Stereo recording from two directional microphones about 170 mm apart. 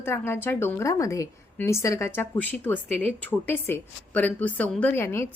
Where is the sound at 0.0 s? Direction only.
15° left (ahead or behind).